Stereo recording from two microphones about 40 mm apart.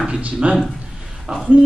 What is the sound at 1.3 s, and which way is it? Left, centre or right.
Speech, right.